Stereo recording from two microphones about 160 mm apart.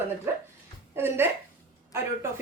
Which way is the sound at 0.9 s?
15° right (ahead or behind).